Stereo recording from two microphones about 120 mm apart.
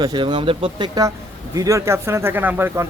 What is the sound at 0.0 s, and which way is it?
Speech, 40° right (ahead or behind).